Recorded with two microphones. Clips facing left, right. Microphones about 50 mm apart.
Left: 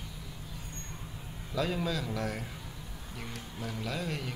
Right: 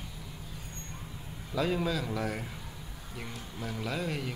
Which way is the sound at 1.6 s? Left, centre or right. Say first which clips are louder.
Right 2 dB; centre.